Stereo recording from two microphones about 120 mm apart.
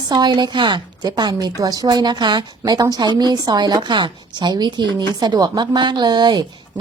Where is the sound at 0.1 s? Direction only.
35° right (ahead or behind).